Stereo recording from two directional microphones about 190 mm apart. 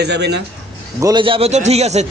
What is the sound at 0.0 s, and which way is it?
Speech, 60° right (ahead or behind).